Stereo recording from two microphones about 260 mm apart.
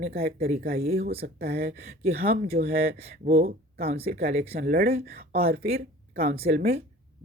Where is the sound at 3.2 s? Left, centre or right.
Right.